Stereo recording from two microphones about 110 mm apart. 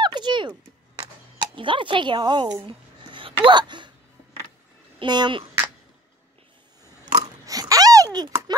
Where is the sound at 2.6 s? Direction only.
50° right (ahead or behind).